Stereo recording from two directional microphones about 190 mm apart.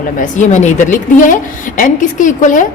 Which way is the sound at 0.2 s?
40° left (ahead or behind).